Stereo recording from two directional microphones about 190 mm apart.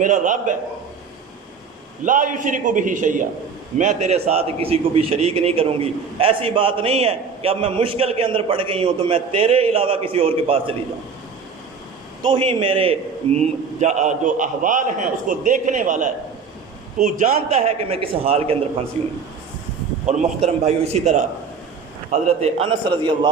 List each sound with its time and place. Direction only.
0.0 s a man's voice: 40° right (ahead or behind)
2.0 s a man's voice: 45° right (ahead or behind)
12.2 s a man's voice: 25° right (ahead or behind)
20.1 s a man's voice: 35° right (ahead or behind)